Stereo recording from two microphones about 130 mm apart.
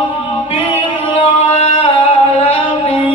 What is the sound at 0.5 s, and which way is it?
Singing, 45° left (ahead or behind).